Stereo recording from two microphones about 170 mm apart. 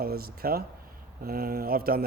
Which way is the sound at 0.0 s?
60° right (ahead or behind).